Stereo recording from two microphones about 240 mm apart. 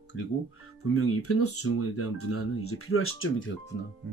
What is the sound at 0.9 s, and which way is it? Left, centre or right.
Speech, left.